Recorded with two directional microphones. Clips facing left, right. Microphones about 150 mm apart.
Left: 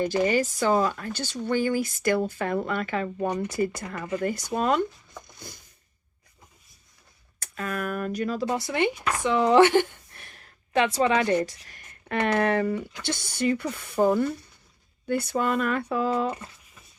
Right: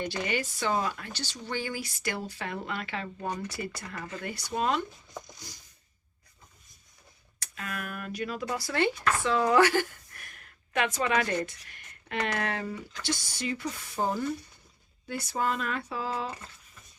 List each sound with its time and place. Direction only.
0.0 s speech: 40° left (ahead or behind)
7.3 s speech: 40° left (ahead or behind)
8.4 s speech: 20° left (ahead or behind); by 12.1 s 40° left (ahead or behind)
12.5 s speech: 60° left (ahead or behind)